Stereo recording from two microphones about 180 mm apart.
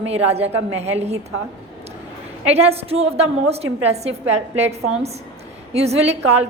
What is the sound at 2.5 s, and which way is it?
A woman's voice, 35° right (ahead or behind).